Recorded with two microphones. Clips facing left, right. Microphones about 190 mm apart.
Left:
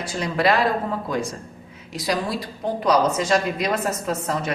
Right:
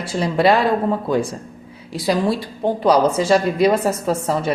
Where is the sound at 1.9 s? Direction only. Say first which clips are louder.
Right 6 dB; 30° right (ahead or behind).